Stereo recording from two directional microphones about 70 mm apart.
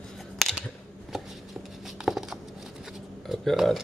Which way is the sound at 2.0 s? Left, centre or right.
Centre.